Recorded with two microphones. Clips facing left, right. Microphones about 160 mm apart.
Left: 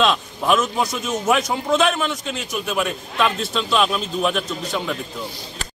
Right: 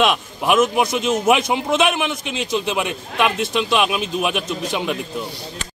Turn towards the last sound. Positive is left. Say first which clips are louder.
# right 2 dB
turn(degrees=-15)  # may be behind; listen again after turning